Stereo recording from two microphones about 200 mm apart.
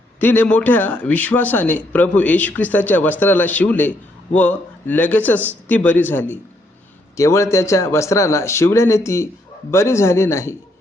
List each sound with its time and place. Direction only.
0.2 s a man's voice: 10° left (ahead or behind)